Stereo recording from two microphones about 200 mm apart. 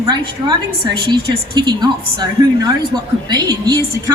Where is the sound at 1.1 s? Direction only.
20° right (ahead or behind).